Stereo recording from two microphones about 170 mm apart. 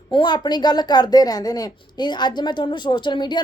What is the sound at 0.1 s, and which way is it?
A woman's voice, 25° left (ahead or behind).